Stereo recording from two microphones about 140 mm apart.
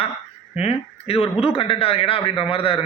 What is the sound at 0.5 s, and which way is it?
A man's voice, 50° left (ahead or behind).